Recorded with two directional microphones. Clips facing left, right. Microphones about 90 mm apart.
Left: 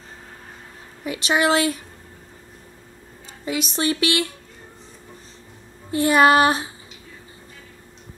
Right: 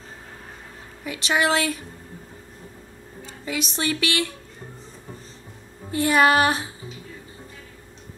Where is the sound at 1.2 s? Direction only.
20° left (ahead or behind).